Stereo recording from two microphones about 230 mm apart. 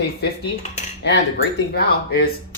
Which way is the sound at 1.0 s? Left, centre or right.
Left.